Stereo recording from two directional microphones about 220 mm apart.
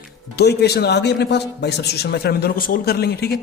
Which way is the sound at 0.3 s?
50° left (ahead or behind).